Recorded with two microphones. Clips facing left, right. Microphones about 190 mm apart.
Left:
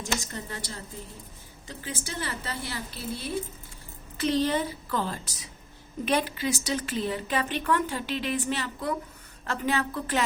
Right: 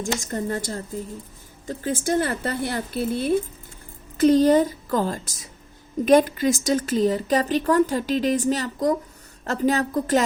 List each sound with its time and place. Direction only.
0.0 s a woman's voice: 45° right (ahead or behind)